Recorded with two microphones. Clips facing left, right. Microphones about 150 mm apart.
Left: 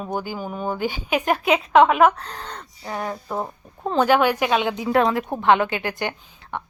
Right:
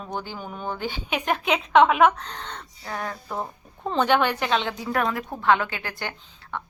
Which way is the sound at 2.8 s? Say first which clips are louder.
Left 4 dB; 20° left (ahead or behind).